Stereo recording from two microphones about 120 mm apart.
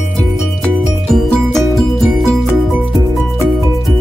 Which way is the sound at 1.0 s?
5° left (ahead or behind).